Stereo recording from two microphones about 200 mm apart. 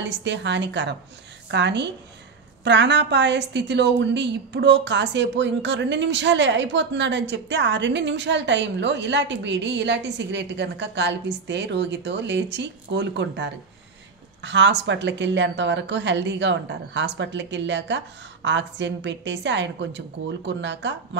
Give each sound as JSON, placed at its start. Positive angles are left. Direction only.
{"t": 0.0, "sound": "a woman's voice", "side_deg": -60}